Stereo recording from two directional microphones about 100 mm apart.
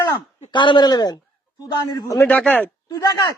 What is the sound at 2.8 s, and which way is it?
Speech, 35° left (ahead or behind).